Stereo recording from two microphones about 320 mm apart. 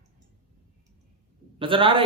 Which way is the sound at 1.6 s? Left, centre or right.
Centre.